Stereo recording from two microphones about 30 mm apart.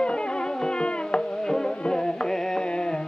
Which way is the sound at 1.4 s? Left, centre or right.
Centre.